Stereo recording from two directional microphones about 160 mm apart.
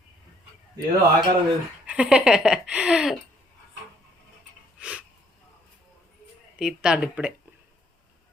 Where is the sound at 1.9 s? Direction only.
5° right (ahead or behind).